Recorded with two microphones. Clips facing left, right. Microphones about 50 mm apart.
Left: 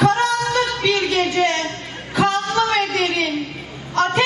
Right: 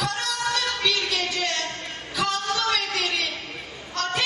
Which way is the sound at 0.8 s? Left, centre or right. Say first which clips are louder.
Left 7 dB; left.